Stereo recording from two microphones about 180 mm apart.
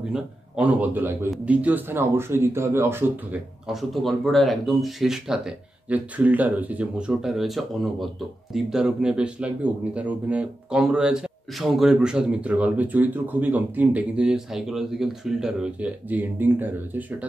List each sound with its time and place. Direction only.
0.1 s a man's voice: 10° right (ahead or behind)